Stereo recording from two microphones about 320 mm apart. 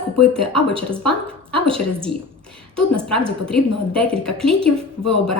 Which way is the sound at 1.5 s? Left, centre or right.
Centre.